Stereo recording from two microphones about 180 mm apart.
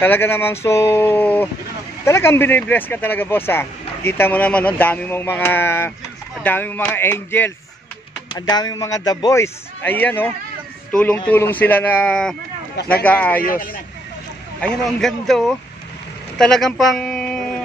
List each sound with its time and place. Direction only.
0.0 s speech: 10° left (ahead or behind)
8.3 s a man's voice: 20° left (ahead or behind)
13.4 s speech: 50° left (ahead or behind)
14.6 s a man's voice: centre (ahead or behind)